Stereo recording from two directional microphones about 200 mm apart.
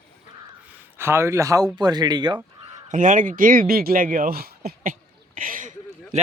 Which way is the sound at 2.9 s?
40° right (ahead or behind).